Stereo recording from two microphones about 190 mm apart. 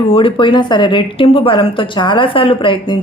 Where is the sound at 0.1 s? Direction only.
25° left (ahead or behind).